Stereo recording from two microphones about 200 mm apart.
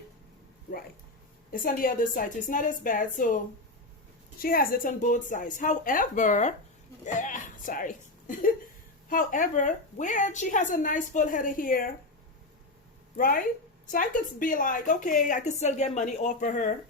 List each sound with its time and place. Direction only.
1.5 s a woman's voice: 45° left (ahead or behind)
4.4 s a woman's voice: 45° left (ahead or behind)
7.0 s a sound: 40° left (ahead or behind)
9.0 s a woman's voice: 40° left (ahead or behind)
13.1 s a woman's voice: 45° left (ahead or behind)